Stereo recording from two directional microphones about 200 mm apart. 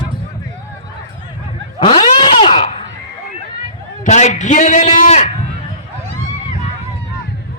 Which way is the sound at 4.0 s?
35° left (ahead or behind).